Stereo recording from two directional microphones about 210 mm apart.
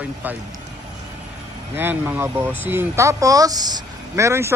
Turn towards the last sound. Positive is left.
turn(degrees=-10)  # may be behind; listen again after turning